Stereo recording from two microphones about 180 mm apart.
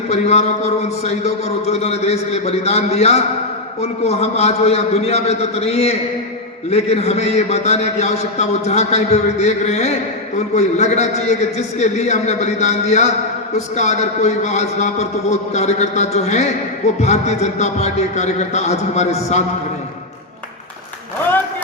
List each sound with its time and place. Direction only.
0.1 s a man's voice: 35° left (ahead or behind)